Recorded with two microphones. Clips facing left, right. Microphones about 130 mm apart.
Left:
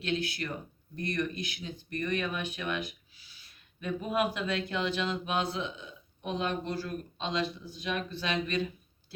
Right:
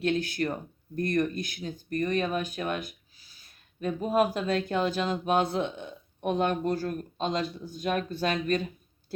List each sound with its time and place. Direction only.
0.0 s speech: 45° right (ahead or behind)